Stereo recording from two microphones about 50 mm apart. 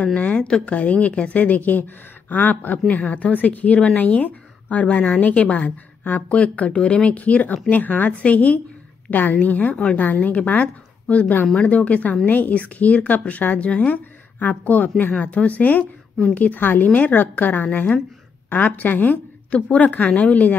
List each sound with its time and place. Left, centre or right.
0.0 s a woman's voice: left